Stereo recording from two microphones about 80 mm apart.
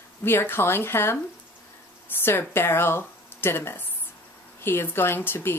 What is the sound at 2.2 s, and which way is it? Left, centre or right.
Speech, left.